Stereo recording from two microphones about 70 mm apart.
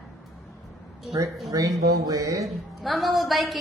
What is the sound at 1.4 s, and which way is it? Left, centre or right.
A woman's voice, right.